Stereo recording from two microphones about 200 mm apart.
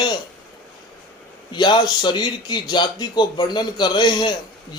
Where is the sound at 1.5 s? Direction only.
20° left (ahead or behind).